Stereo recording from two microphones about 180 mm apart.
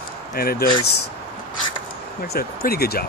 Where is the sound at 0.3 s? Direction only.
55° left (ahead or behind).